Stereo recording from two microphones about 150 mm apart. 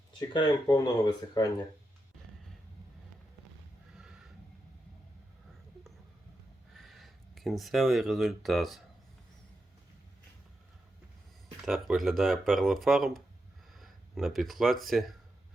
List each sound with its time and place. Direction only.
0.2 s speech: 30° left (ahead or behind)
3.9 s a sound: 5° right (ahead or behind)
6.7 s speech: centre (ahead or behind)
11.6 s speech: centre (ahead or behind)